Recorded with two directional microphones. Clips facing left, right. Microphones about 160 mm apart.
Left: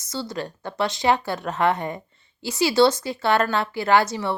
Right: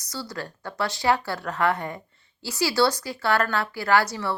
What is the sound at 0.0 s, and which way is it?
Speech, 20° left (ahead or behind).